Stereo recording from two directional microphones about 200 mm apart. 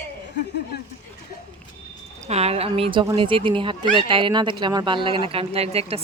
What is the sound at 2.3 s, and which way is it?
Speech, 30° right (ahead or behind).